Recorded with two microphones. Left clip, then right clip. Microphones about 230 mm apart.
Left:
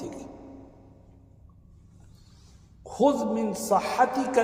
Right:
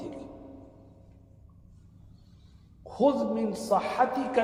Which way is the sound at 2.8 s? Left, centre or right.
Left.